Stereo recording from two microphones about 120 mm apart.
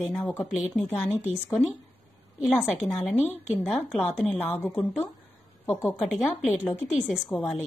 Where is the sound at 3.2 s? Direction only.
15° left (ahead or behind).